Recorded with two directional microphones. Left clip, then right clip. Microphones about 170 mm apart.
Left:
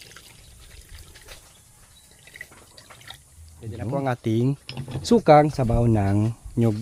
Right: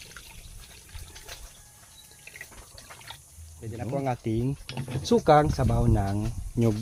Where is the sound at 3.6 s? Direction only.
20° left (ahead or behind).